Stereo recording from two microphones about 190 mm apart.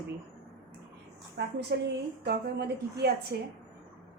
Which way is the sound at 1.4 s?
60° right (ahead or behind).